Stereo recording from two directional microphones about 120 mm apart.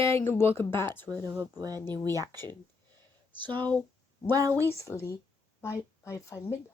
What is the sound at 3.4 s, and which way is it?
Speech, 40° right (ahead or behind).